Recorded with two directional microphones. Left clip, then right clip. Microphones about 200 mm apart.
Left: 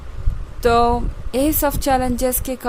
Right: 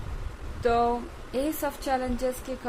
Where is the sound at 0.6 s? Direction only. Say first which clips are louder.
Left 9 dB; 55° left (ahead or behind).